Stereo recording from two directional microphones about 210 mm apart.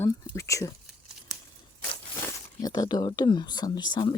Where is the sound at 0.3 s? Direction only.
15° left (ahead or behind).